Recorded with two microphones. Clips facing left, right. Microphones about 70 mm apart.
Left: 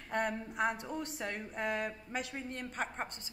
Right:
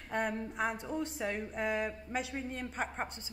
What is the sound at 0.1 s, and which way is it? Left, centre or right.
A woman's voice, centre.